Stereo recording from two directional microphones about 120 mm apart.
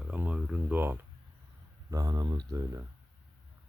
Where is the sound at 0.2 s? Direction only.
10° right (ahead or behind).